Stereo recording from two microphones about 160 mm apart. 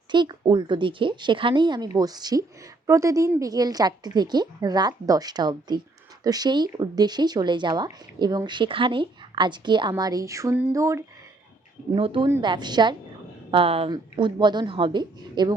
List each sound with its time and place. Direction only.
0.1 s speech: 30° right (ahead or behind)
11.9 s speech: 35° right (ahead or behind)